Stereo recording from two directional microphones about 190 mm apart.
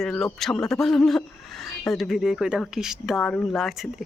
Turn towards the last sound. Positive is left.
turn(degrees=0)  # may be behind; listen again after turning